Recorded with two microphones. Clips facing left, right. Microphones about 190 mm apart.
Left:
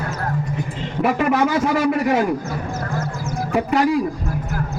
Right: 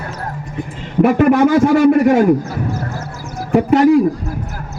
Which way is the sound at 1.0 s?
50° right (ahead or behind).